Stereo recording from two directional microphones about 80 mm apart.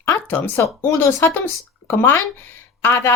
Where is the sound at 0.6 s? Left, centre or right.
Left.